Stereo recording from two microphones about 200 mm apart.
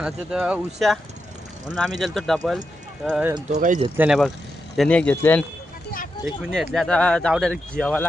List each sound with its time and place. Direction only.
0.0 s speech: 5° right (ahead or behind)
3.5 s speech: 40° right (ahead or behind)
3.9 s speech: 5° right (ahead or behind)
4.8 s speech: 5° left (ahead or behind)